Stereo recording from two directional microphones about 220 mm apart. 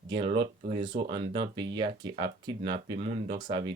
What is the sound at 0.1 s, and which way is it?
Speech, 20° right (ahead or behind).